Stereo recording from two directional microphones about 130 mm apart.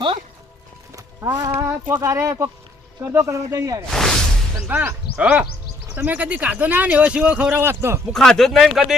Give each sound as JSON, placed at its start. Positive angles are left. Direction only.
{"t": 0.9, "sound": "speech", "side_deg": -30}
{"t": 3.9, "sound": "a sound", "side_deg": 5}
{"t": 4.5, "sound": "speech", "side_deg": -15}
{"t": 8.1, "sound": "speech", "side_deg": 5}